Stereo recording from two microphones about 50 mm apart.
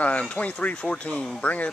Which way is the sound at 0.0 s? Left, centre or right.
Left.